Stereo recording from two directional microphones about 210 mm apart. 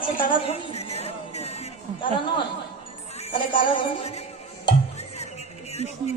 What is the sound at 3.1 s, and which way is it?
A woman's voice, 25° left (ahead or behind).